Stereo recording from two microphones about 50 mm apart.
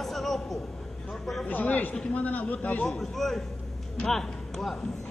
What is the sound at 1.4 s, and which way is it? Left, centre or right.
A man's voice, left.